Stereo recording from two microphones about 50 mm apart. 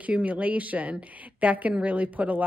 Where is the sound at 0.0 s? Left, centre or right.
Right.